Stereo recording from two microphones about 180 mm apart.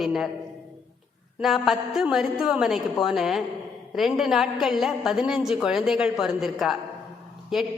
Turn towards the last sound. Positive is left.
turn(degrees=0)  # may be behind; listen again after turning